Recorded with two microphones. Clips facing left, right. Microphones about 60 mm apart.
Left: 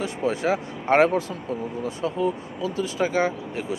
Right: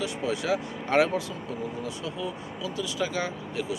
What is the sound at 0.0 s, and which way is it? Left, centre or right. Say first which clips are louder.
Speech: left 5 dB; left.